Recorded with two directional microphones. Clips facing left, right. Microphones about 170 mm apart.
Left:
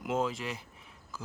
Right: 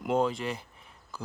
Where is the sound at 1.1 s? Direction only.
Centre (ahead or behind).